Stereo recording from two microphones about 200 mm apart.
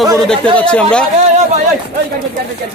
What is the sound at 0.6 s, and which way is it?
Speech, 5° left (ahead or behind).